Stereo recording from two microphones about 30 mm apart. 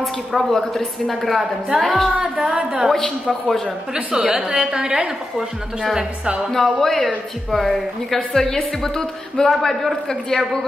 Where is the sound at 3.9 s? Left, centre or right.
Right.